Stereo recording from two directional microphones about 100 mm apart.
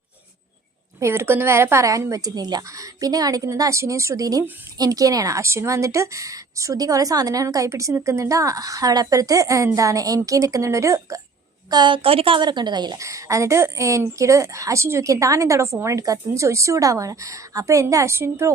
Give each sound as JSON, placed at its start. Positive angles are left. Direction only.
{"t": 0.9, "sound": "a woman's voice", "side_deg": -25}
{"t": 11.7, "sound": "a woman's voice", "side_deg": -45}
{"t": 12.0, "sound": "a woman's voice", "side_deg": -65}
{"t": 13.0, "sound": "a woman's voice", "side_deg": -30}